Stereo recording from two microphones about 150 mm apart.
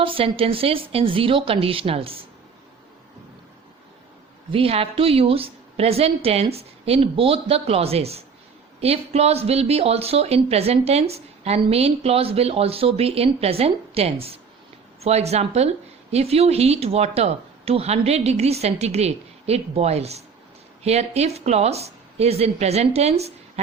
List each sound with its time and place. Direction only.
0.0 s a woman's voice: 35° right (ahead or behind)
4.5 s a woman's voice: 40° right (ahead or behind)